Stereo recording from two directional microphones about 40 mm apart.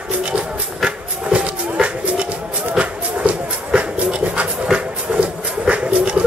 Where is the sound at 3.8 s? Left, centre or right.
Right.